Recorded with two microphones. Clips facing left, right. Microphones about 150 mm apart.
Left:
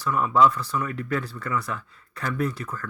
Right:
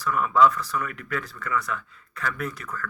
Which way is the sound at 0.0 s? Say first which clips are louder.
Even; 30° left (ahead or behind).